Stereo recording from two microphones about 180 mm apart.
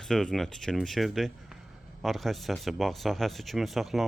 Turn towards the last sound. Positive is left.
turn(degrees=0)  # may be behind; listen again after turning